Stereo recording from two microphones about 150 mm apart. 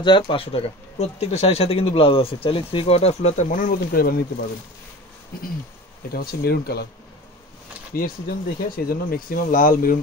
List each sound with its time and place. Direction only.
0.0 s speech: 35° left (ahead or behind); by 4.2 s 75° left (ahead or behind)
6.1 s speech: 90° left
7.9 s speech: 75° left (ahead or behind)